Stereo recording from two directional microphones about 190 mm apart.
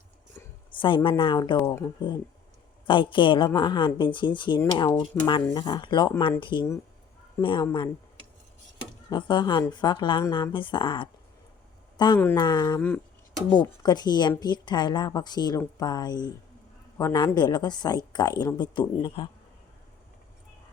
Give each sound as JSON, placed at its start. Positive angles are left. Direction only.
{"t": 0.4, "sound": "a sound", "side_deg": 10}
{"t": 0.7, "sound": "a woman's voice", "side_deg": 25}
{"t": 2.8, "sound": "a woman's voice", "side_deg": 25}